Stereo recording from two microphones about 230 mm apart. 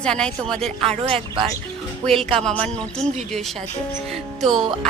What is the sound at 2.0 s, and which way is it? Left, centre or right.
A woman's voice, centre.